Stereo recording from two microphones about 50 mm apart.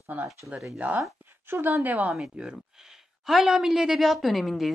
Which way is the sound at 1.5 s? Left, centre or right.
Right.